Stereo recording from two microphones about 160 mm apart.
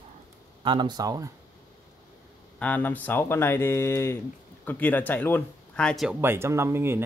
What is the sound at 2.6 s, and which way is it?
Speech, 10° left (ahead or behind).